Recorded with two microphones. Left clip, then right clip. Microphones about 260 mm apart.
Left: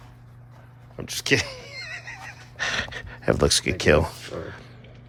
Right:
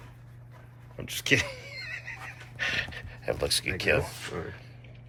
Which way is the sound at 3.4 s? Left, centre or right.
Left.